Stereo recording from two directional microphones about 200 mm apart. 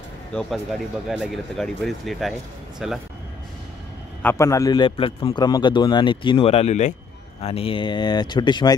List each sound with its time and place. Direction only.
0.3 s speech: 5° left (ahead or behind)
4.2 s a man's voice: 10° left (ahead or behind)